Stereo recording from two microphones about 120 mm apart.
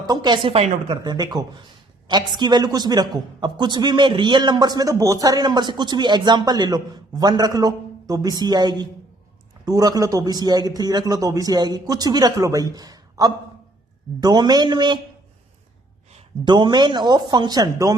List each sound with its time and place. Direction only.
0.1 s a man's voice: 35° right (ahead or behind)
0.4 s a woman's voice: 55° right (ahead or behind)
1.0 s a man's voice: 35° right (ahead or behind)
16.4 s a man's voice: 40° right (ahead or behind)